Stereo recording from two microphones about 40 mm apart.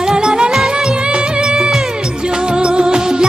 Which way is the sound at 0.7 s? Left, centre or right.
Right.